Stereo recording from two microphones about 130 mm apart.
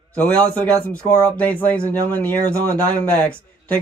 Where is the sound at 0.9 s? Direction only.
10° left (ahead or behind).